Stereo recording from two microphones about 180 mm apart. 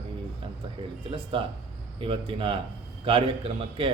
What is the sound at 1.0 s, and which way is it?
A man's voice, 30° right (ahead or behind).